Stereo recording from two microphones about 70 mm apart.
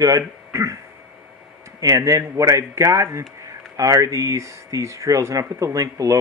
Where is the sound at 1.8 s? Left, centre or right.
Right.